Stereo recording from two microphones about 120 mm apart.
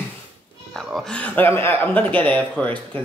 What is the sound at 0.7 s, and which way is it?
Speech, centre (ahead or behind).